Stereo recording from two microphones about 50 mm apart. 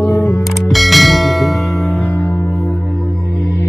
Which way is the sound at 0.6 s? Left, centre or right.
Centre.